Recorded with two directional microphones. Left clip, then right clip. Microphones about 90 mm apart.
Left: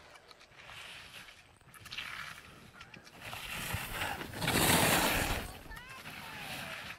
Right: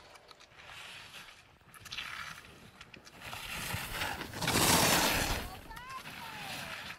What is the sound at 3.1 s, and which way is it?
Boat, 20° right (ahead or behind).